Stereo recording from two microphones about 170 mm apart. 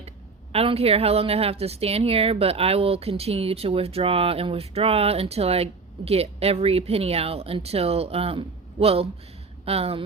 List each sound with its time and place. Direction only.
0.5 s speech: 35° right (ahead or behind)